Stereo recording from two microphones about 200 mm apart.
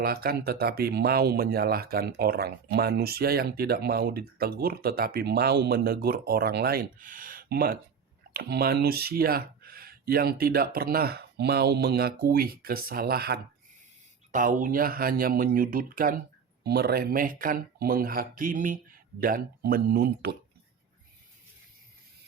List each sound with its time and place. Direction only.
0.0 s speech: 50° right (ahead or behind)